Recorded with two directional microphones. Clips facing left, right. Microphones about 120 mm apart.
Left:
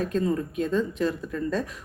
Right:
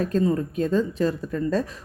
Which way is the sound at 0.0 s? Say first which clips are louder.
Right 3 dB; 40° right (ahead or behind).